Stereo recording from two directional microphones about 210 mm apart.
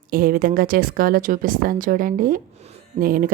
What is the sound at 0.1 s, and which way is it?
A woman's voice, 45° right (ahead or behind).